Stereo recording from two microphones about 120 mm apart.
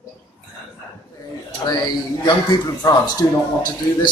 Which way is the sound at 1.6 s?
35° left (ahead or behind).